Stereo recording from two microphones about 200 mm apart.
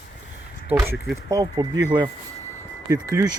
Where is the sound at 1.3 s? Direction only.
20° right (ahead or behind).